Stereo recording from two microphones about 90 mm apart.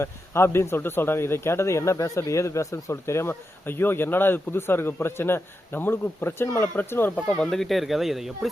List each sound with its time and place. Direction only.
0.0 s a man's voice: 30° left (ahead or behind)
7.3 s speech: 5° left (ahead or behind)